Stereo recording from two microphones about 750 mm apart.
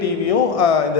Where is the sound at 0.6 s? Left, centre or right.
Left.